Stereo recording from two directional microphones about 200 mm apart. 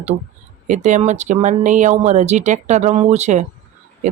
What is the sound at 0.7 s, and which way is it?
Speech, 40° right (ahead or behind).